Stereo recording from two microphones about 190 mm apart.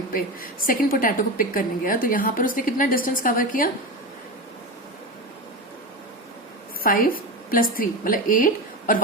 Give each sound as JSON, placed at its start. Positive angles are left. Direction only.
{"t": 0.7, "sound": "a woman's voice", "side_deg": 50}
{"t": 6.8, "sound": "a woman's voice", "side_deg": 50}